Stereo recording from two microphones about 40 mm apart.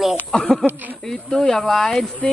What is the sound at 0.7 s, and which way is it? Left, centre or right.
Speech, right.